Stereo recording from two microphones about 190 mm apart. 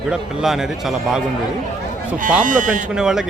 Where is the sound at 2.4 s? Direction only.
45° right (ahead or behind).